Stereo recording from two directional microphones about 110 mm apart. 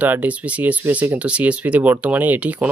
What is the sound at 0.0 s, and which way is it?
Speech, 15° right (ahead or behind).